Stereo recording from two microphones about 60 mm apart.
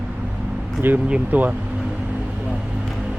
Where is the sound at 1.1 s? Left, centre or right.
Centre.